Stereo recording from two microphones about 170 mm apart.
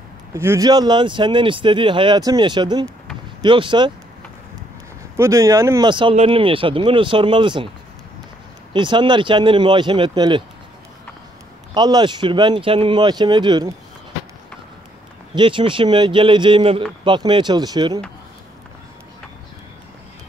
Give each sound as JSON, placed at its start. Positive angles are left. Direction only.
{"t": 0.3, "sound": "speech", "side_deg": -15}
{"t": 5.1, "sound": "speech", "side_deg": -15}
{"t": 8.7, "sound": "speech", "side_deg": -30}
{"t": 11.7, "sound": "speech", "side_deg": -25}
{"t": 15.3, "sound": "speech", "side_deg": -30}